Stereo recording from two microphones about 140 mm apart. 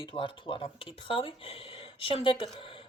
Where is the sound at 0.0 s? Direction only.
35° left (ahead or behind).